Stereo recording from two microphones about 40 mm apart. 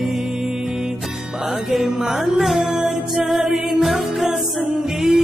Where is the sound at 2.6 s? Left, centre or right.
Centre.